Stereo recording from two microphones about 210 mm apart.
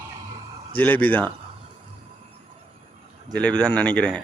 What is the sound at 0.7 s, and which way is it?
Speech, 10° left (ahead or behind).